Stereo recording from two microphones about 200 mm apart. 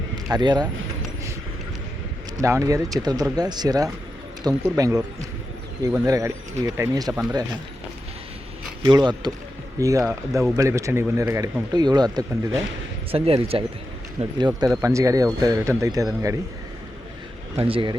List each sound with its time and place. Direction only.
0.3 s speech: 20° right (ahead or behind)
2.4 s speech: 15° right (ahead or behind)
8.8 s speech: 20° right (ahead or behind)
17.6 s speech: 25° right (ahead or behind)